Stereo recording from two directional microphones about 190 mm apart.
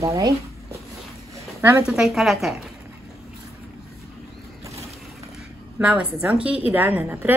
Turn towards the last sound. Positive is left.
turn(degrees=-10)  # may be behind; listen again after turning